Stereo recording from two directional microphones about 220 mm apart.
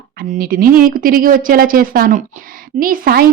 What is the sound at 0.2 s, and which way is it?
Speech, 40° right (ahead or behind).